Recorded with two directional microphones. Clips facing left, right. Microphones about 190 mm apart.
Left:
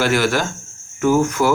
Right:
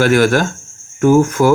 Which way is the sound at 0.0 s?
50° right (ahead or behind).